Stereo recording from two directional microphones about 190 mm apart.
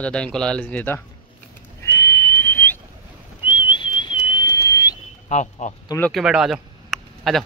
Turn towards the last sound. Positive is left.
turn(degrees=0)  # may be behind; listen again after turning